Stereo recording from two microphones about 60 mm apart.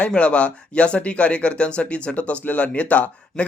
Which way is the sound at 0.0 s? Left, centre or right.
Centre.